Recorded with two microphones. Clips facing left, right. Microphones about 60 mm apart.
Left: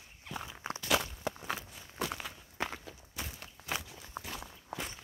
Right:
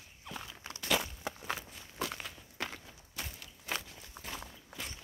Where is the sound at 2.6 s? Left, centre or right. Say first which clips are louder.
Left 3 dB; centre.